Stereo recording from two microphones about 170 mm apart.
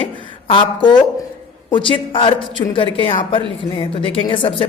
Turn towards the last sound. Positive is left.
turn(degrees=30)  # may be behind; listen again after turning